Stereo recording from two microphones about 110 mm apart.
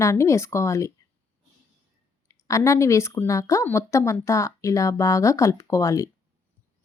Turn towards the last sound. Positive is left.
turn(degrees=30)  # may be behind; listen again after turning